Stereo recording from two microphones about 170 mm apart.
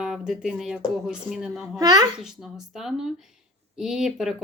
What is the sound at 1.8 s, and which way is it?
Speech, 20° right (ahead or behind).